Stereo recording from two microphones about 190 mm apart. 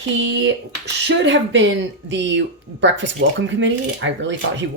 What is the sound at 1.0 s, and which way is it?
Speech, 70° right (ahead or behind).